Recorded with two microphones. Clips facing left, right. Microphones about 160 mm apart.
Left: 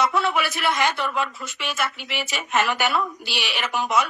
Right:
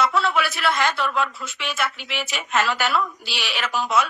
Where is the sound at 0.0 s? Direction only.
15° left (ahead or behind).